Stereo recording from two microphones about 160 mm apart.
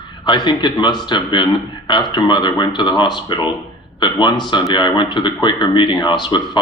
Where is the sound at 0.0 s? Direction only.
30° left (ahead or behind).